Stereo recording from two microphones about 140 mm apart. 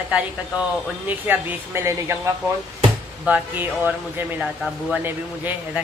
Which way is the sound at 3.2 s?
10° right (ahead or behind).